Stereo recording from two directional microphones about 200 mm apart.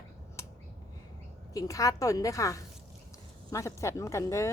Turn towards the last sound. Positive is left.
turn(degrees=15)  # may be behind; listen again after turning